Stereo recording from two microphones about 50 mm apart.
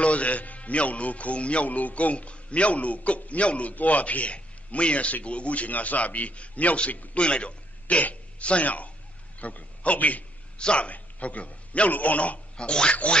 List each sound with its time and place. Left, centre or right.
0.0 s a man's voice: left